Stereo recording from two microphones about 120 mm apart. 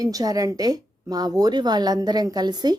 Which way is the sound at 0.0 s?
30° right (ahead or behind).